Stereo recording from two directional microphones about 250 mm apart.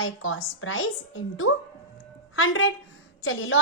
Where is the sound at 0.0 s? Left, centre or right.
Left.